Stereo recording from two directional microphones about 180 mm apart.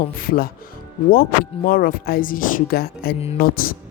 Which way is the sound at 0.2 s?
55° left (ahead or behind).